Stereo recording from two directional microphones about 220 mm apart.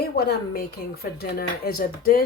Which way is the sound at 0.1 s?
50° left (ahead or behind).